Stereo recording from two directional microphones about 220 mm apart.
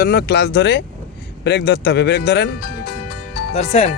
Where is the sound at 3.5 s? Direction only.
30° left (ahead or behind).